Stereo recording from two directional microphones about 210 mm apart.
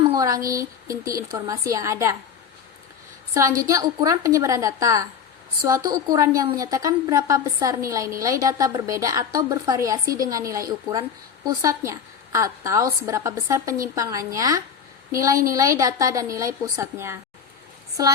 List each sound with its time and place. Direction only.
0.1 s a sound: 15° right (ahead or behind)
0.5 s a woman's voice: 15° right (ahead or behind)
3.3 s a woman's voice: 15° right (ahead or behind)